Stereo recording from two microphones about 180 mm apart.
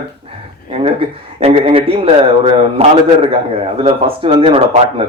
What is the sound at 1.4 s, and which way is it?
A man's voice, 30° right (ahead or behind).